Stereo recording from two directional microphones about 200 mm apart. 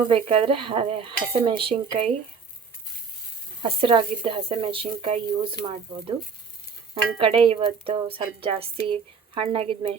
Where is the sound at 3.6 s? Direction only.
25° right (ahead or behind).